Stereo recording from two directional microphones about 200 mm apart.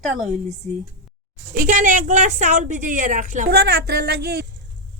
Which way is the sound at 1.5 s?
40° right (ahead or behind).